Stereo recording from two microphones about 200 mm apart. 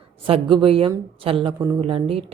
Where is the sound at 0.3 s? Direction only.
25° right (ahead or behind).